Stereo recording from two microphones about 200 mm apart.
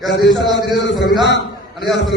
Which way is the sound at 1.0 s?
60° left (ahead or behind).